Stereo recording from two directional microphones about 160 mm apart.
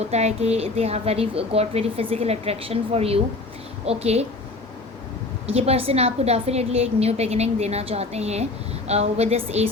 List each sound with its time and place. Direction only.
0.0 s a woman's voice: 45° right (ahead or behind)
5.5 s a woman's voice: 40° right (ahead or behind)